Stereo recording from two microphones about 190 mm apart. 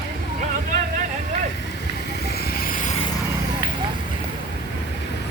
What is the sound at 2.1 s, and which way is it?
Vehicle, 55° left (ahead or behind).